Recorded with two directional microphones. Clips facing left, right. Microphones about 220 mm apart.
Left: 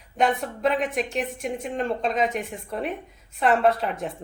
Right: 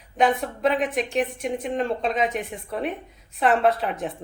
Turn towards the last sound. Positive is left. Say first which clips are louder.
# even
turn(degrees=0)  # may be behind; listen again after turning